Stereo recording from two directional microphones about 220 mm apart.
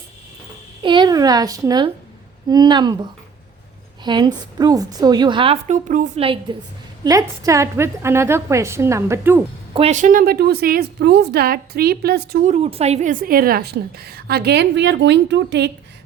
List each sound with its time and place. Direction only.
0.8 s a woman's voice: 20° right (ahead or behind)
9.7 s a woman's voice: 30° right (ahead or behind); by 15.7 s 50° right (ahead or behind)